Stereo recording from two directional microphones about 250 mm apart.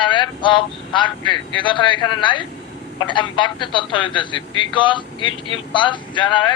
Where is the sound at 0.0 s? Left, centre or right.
Centre.